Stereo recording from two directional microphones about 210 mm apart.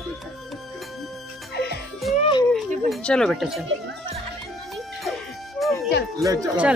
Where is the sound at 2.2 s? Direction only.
20° left (ahead or behind).